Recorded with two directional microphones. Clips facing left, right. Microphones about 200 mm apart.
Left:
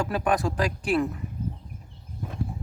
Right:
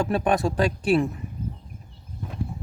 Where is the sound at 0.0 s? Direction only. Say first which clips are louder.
Right 3 dB; 25° right (ahead or behind).